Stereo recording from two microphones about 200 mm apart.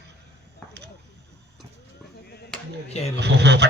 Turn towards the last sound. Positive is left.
turn(degrees=-60)  # may be behind; listen again after turning